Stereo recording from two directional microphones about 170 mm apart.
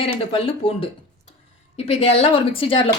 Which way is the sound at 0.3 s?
30° left (ahead or behind).